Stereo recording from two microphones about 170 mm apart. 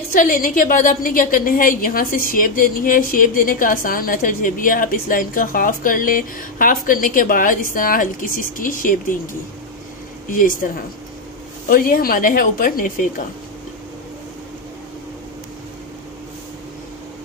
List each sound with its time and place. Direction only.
0.1 s a woman's voice: 55° left (ahead or behind)
10.3 s speech: 55° left (ahead or behind)
11.7 s speech: 55° left (ahead or behind)